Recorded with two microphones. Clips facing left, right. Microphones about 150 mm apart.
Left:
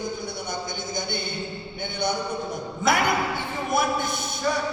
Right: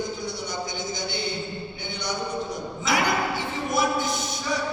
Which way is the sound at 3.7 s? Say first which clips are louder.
Even; 55° left (ahead or behind).